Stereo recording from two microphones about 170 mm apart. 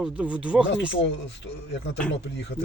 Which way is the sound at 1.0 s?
90° left.